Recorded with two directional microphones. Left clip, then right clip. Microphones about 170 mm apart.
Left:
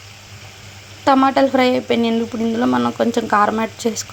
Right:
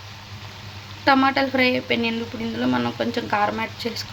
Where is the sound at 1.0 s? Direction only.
35° left (ahead or behind).